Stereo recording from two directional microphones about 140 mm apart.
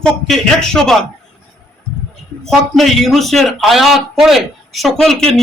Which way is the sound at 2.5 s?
Centre (ahead or behind).